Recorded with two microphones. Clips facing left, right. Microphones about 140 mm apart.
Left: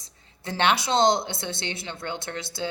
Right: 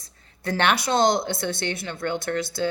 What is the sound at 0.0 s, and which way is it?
A woman's voice, 20° left (ahead or behind).